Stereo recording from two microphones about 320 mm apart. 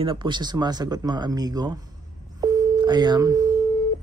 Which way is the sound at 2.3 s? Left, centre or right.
Centre.